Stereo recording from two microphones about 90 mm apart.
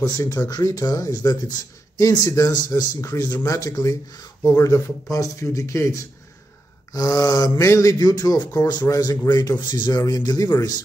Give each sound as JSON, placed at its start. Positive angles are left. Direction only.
{"t": 0.5, "sound": "speech", "side_deg": 45}
{"t": 8.8, "sound": "speech", "side_deg": 40}